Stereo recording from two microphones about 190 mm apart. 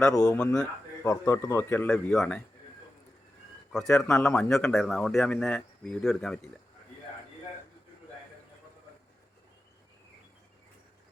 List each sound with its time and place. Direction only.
0.1 s a man's voice: 20° left (ahead or behind)
1.9 s speech: centre (ahead or behind)
3.7 s a man's voice: centre (ahead or behind)